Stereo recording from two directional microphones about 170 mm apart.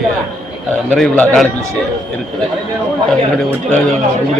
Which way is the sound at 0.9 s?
5° left (ahead or behind).